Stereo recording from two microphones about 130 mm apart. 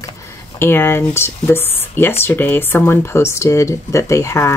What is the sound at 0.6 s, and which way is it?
Speech, 15° left (ahead or behind).